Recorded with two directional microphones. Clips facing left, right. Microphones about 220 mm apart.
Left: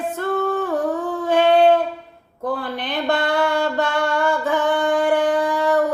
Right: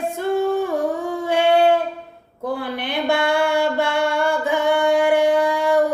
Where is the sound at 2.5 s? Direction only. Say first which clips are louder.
Right 1 dB; 10° right (ahead or behind).